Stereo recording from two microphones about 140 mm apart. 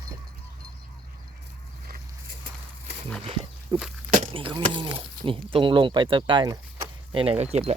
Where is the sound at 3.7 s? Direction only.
30° right (ahead or behind); by 7.7 s 50° right (ahead or behind).